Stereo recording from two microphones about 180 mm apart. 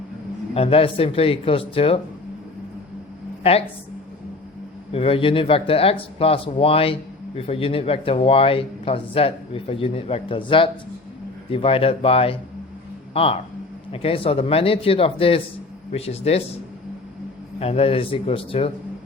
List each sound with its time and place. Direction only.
0.5 s speech: 30° left (ahead or behind)
3.4 s speech: 30° left (ahead or behind)
4.9 s speech: 30° left (ahead or behind)
17.6 s speech: 35° left (ahead or behind)